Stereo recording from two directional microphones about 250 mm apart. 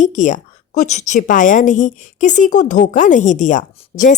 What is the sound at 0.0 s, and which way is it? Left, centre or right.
A woman's voice, left.